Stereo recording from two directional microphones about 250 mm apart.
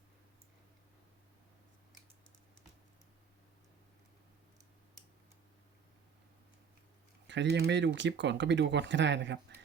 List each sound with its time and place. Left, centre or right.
7.3 s speech: right